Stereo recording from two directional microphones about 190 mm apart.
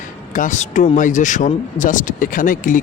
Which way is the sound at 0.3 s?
40° left (ahead or behind).